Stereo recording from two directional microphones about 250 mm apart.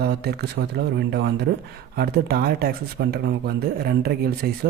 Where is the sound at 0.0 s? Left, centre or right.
Right.